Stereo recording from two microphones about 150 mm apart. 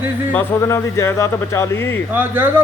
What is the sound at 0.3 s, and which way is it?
Speech, 20° left (ahead or behind).